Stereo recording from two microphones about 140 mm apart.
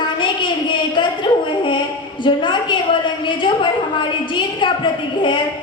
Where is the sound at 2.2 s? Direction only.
35° left (ahead or behind).